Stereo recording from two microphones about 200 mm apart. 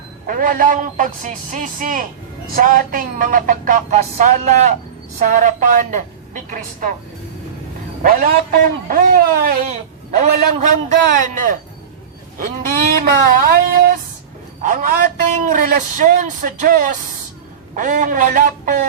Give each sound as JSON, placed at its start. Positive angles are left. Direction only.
{"t": 0.3, "sound": "a man's voice", "side_deg": -45}
{"t": 2.6, "sound": "music", "side_deg": -45}
{"t": 5.2, "sound": "a man's voice", "side_deg": -40}
{"t": 8.0, "sound": "music", "side_deg": -45}
{"t": 9.7, "sound": "a man's voice", "side_deg": -35}
{"t": 13.4, "sound": "music", "side_deg": -45}
{"t": 14.6, "sound": "a man's voice", "side_deg": -45}
{"t": 17.7, "sound": "music", "side_deg": -40}